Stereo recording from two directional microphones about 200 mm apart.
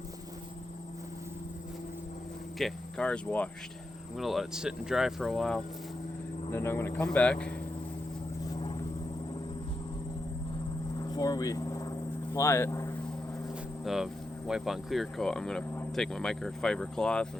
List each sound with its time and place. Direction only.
2.6 s speech: 5° left (ahead or behind)
11.0 s a sound: 20° left (ahead or behind)
13.8 s speech: centre (ahead or behind)